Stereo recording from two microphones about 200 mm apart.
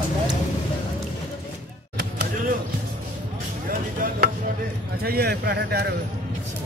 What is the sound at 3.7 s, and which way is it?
Chopping, 45° right (ahead or behind).